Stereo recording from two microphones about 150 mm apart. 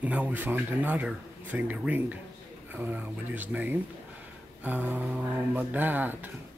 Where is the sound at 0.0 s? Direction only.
10° right (ahead or behind).